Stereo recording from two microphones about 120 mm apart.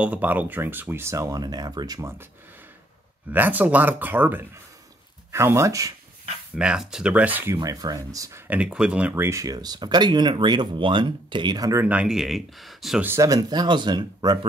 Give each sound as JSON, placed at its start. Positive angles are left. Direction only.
{"t": 0.0, "sound": "speech", "side_deg": -15}
{"t": 3.3, "sound": "speech", "side_deg": -15}
{"t": 6.5, "sound": "speech", "side_deg": -10}
{"t": 7.5, "sound": "speech", "side_deg": -30}
{"t": 8.5, "sound": "speech", "side_deg": -10}
{"t": 9.1, "sound": "speech", "side_deg": -25}
{"t": 11.8, "sound": "speech", "side_deg": -10}
{"t": 13.0, "sound": "speech", "side_deg": -25}